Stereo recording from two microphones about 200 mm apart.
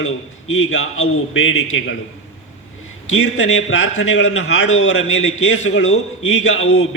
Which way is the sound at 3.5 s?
90° left.